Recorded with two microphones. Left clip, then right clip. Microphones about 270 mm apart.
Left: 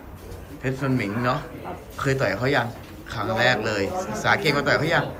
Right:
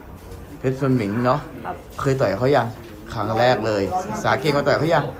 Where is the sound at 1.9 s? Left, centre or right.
Centre.